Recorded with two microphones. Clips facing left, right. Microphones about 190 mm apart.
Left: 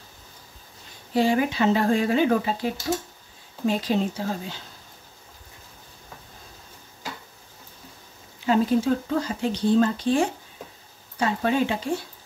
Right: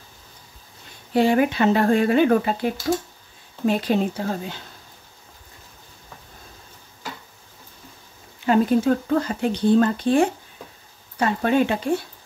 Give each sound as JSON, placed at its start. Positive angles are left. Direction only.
{"t": 1.1, "sound": "speech", "side_deg": -60}
{"t": 8.5, "sound": "speech", "side_deg": -55}